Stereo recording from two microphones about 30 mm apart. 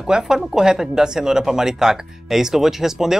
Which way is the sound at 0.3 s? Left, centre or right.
Centre.